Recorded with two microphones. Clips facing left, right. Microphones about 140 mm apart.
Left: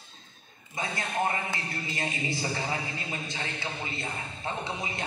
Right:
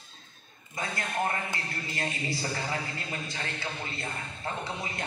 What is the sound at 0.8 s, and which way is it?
A man's voice, 20° left (ahead or behind).